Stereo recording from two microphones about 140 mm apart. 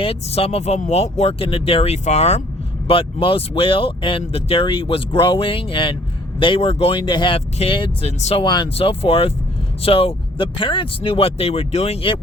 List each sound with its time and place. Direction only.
0.0 s speech: 45° left (ahead or behind)
8.4 s speech: 30° left (ahead or behind)
8.7 s speech: 45° left (ahead or behind)